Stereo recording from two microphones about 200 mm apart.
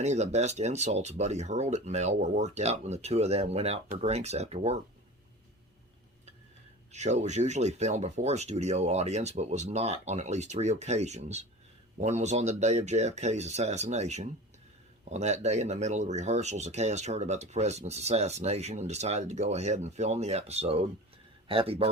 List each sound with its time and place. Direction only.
0.0 s speech: 35° right (ahead or behind)
6.9 s speech: 35° right (ahead or behind)